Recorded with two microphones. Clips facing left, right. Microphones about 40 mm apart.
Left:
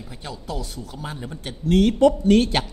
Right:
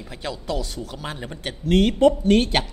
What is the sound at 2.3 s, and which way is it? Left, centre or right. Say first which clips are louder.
Speech: left 1 dB; right.